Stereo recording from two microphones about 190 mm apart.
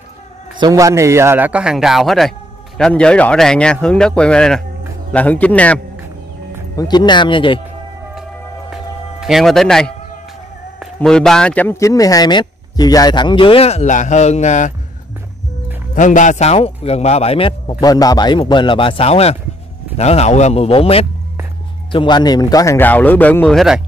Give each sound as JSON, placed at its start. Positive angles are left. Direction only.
{"t": 0.6, "sound": "a man's voice", "side_deg": -15}
{"t": 6.8, "sound": "speech", "side_deg": 20}
{"t": 8.1, "sound": "music", "side_deg": 0}
{"t": 11.0, "sound": "speech", "side_deg": 5}
{"t": 15.9, "sound": "a man's voice", "side_deg": 45}